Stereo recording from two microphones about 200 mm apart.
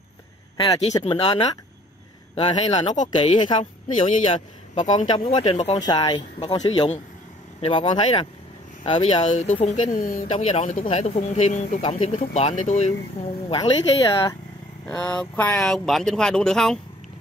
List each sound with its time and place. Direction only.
0.6 s speech: 25° left (ahead or behind)
2.9 s speech: 35° left (ahead or behind)
3.3 s speech: 25° left (ahead or behind); by 10.2 s 45° left (ahead or behind)
10.2 s speech: 30° left (ahead or behind)
13.5 s speech: 20° left (ahead or behind)
14.9 s speech: 5° left (ahead or behind)